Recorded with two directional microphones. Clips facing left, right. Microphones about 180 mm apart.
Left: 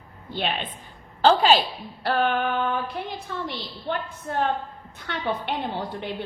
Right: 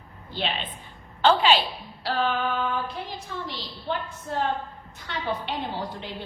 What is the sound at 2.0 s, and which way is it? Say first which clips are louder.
A woman's voice: left 3 dB; 55° left (ahead or behind).